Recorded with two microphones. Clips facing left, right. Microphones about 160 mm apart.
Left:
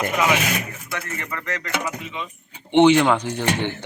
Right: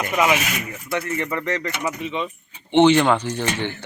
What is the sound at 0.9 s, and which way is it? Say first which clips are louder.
Speech: right 7 dB; 25° right (ahead or behind).